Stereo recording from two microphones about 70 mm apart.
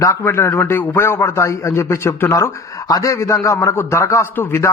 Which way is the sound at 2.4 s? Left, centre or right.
Left.